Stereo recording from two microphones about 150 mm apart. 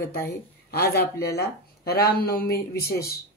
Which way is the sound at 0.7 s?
90° left.